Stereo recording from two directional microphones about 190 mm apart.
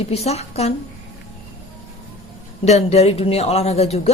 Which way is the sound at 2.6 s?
35° left (ahead or behind).